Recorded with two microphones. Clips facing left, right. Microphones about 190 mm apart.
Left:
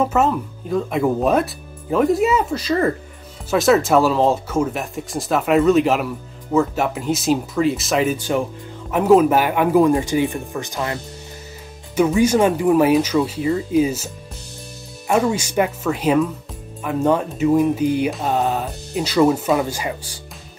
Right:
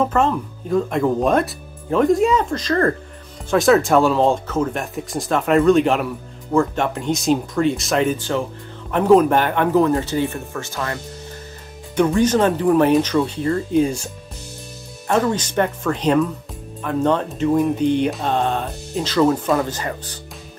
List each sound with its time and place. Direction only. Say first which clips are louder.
0.0 s speech: even; 5° left (ahead or behind)
11.9 s speech: left 1 dB; 5° left (ahead or behind)